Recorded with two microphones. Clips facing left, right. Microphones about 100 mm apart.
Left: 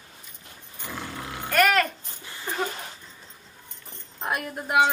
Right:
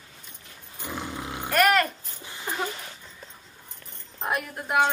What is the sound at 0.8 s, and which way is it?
Dog, 20° right (ahead or behind).